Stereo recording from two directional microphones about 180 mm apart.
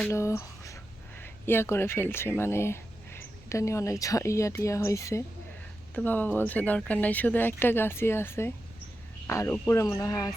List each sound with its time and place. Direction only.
0.1 s speech: 15° left (ahead or behind)